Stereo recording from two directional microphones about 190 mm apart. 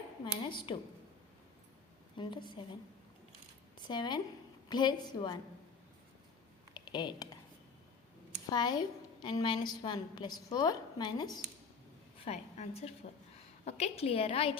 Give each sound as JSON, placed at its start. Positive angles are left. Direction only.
{"t": 0.3, "sound": "a woman's voice", "side_deg": 25}
{"t": 2.1, "sound": "a woman's voice", "side_deg": 25}
{"t": 3.8, "sound": "a woman's voice", "side_deg": 25}
{"t": 6.7, "sound": "computer keyboard", "side_deg": 25}
{"t": 8.4, "sound": "a woman's voice", "side_deg": 20}
{"t": 12.2, "sound": "a woman's voice", "side_deg": 35}